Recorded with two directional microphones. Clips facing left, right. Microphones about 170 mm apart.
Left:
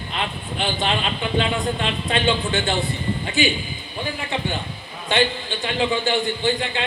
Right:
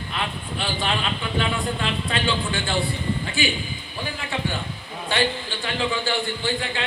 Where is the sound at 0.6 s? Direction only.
20° left (ahead or behind).